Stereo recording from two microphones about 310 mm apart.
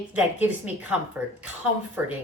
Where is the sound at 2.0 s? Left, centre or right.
Centre.